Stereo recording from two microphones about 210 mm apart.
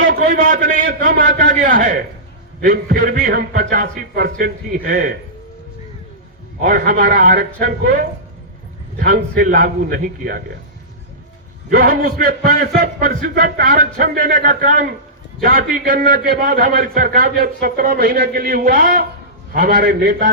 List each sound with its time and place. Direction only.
0.0 s a man's voice: 45° right (ahead or behind)
6.6 s a man's voice: 40° right (ahead or behind)
11.7 s a man's voice: 45° right (ahead or behind)